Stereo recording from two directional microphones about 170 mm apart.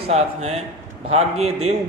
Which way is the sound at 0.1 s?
40° right (ahead or behind).